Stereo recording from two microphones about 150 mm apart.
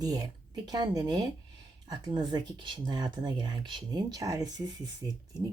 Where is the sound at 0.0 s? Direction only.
25° right (ahead or behind).